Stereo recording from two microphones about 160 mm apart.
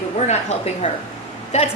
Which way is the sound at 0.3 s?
45° left (ahead or behind).